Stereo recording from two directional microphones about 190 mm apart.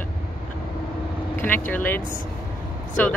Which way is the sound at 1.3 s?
10° left (ahead or behind).